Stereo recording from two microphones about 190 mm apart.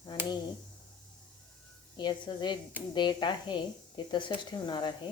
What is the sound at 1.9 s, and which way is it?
A woman's voice, 25° left (ahead or behind).